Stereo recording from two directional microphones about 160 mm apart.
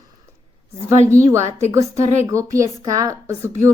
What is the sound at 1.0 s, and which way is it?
A woman's voice, 15° right (ahead or behind).